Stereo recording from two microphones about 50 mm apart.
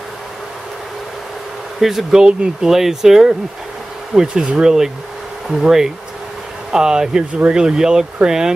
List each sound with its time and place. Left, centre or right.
1.8 s speech: centre; by 7.6 s right
7.6 s speech: centre